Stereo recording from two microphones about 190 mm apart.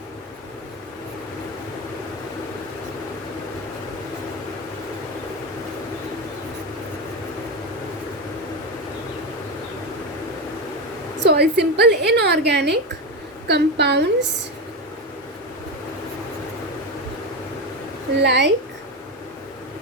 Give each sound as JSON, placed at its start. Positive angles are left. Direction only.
{"t": 11.2, "sound": "a woman's voice", "side_deg": -60}
{"t": 18.2, "sound": "a woman's voice", "side_deg": -65}